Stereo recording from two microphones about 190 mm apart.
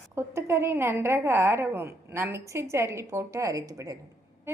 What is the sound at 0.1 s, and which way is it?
A woman's voice, 15° right (ahead or behind).